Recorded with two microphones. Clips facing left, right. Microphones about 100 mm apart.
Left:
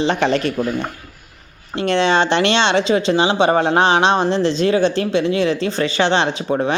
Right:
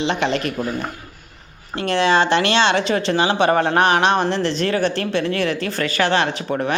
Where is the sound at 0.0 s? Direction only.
35° left (ahead or behind).